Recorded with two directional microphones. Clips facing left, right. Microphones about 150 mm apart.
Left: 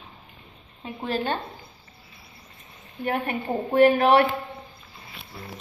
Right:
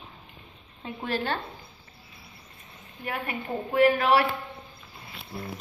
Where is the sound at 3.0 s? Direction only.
30° left (ahead or behind).